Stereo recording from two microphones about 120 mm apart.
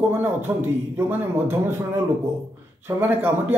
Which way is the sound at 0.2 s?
20° right (ahead or behind).